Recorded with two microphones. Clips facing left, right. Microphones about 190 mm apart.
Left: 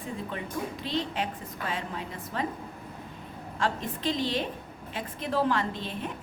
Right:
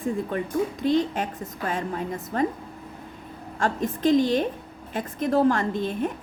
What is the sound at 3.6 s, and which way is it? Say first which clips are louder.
A woman's voice: right 6 dB; 45° right (ahead or behind).